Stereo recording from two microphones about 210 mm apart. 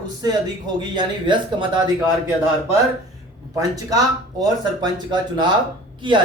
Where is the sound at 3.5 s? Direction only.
15° right (ahead or behind).